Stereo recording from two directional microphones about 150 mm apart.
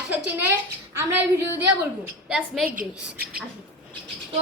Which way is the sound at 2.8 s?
85° right.